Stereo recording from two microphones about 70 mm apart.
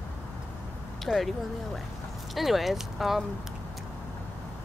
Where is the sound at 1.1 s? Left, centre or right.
Centre.